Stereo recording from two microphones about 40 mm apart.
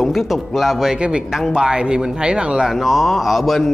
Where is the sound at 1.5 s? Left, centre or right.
Centre.